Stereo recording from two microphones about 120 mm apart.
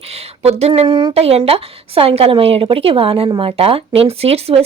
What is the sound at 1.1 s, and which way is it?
A woman's voice, 60° right (ahead or behind).